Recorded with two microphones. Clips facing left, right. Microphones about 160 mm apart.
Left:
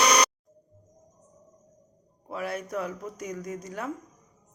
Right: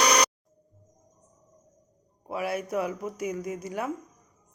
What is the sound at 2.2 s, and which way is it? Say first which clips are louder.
Speech: right 3 dB; 10° right (ahead or behind).